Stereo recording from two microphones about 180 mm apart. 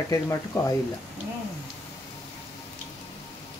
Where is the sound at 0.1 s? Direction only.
20° left (ahead or behind).